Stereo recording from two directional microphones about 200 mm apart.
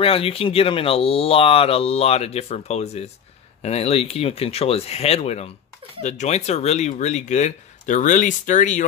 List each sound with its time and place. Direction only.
0.0 s speech: 30° left (ahead or behind)